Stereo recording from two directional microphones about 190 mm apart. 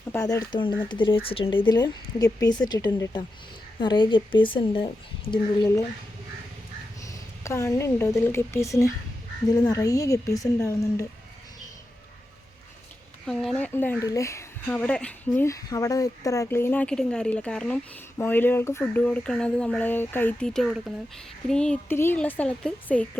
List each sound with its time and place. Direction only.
0.1 s speech: 20° left (ahead or behind)
7.0 s speech: 15° left (ahead or behind)
13.2 s speech: centre (ahead or behind)